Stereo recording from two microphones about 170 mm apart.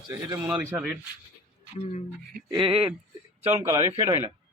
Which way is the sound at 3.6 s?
20° right (ahead or behind).